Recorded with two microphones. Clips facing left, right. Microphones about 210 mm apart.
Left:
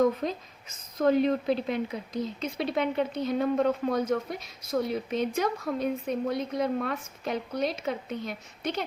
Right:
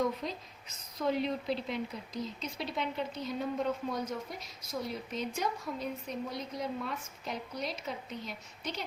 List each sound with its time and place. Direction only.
0.0 s speech: 50° left (ahead or behind)